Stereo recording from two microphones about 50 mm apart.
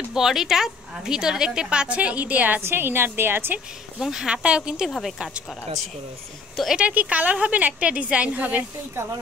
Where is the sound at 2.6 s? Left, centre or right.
Right.